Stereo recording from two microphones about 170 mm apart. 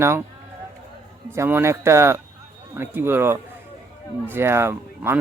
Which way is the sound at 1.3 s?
15° right (ahead or behind).